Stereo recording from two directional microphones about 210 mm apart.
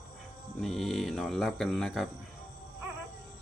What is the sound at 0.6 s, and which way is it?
Speech, centre (ahead or behind).